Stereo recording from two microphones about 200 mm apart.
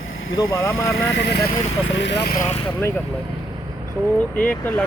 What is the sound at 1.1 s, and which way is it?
Speech, 60° left (ahead or behind).